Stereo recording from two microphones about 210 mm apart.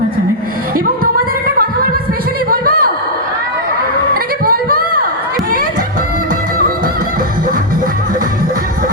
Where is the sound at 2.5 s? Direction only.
45° right (ahead or behind).